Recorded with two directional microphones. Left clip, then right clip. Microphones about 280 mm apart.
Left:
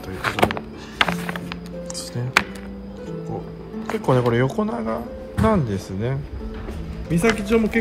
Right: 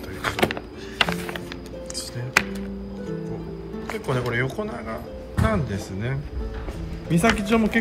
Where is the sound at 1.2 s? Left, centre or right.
Centre.